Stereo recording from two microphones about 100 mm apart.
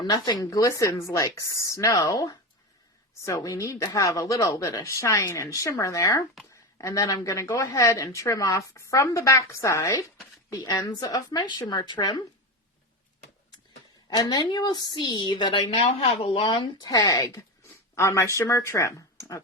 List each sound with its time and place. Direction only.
0.0 s a woman's voice: 40° left (ahead or behind)
14.1 s a woman's voice: 40° left (ahead or behind)
15.7 s a woman's voice: 85° left; by 16.9 s 50° left (ahead or behind)
16.9 s speech: 35° left (ahead or behind)